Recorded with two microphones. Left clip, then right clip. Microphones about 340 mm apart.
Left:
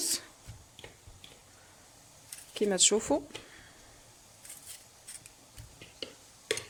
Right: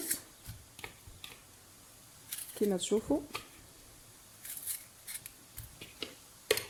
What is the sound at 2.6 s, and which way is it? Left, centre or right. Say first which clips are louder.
Speech: left 5 dB; left.